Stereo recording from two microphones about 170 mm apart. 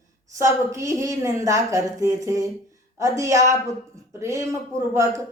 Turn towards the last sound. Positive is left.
turn(degrees=-20)  # may be behind; listen again after turning